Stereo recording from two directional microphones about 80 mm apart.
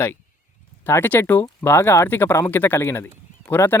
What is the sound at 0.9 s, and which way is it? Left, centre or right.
Speech, left.